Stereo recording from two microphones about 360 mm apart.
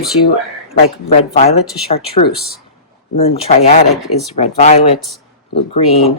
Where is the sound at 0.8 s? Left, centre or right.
Centre.